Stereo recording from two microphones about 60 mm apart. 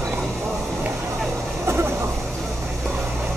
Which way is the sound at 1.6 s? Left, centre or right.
Right.